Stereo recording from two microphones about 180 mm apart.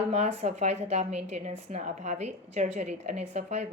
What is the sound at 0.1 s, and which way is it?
A woman's voice, 35° right (ahead or behind).